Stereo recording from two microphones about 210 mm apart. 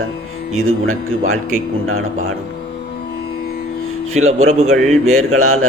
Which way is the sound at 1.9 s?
80° right.